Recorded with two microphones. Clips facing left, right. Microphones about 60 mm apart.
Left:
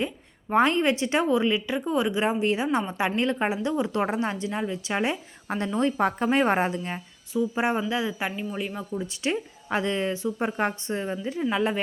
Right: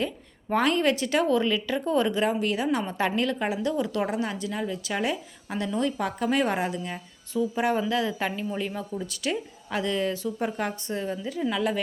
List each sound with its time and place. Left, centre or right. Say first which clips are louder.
0.0 s speech: even; left
2.4 s speech: left 2 dB; left; by 8.9 s centre
8.9 s speech: left 2 dB; left